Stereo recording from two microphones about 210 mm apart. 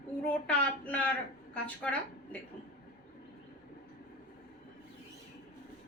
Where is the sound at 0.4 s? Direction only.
5° left (ahead or behind).